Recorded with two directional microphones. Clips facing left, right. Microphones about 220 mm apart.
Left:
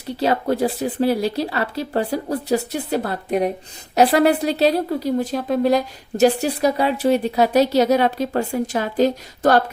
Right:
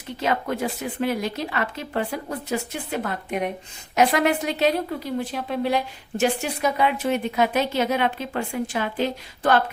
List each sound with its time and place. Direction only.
0.2 s a woman's voice: 35° left (ahead or behind)